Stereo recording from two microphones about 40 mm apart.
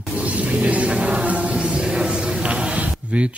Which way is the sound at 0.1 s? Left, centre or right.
Right.